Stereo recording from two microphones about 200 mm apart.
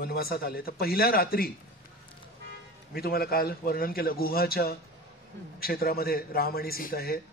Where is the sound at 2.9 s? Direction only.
50° left (ahead or behind).